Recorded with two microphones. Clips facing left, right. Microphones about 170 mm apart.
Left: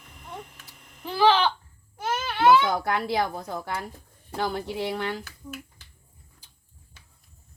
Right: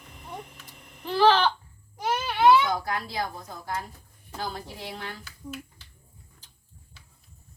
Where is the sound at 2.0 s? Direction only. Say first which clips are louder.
Right 1 dB; 10° right (ahead or behind).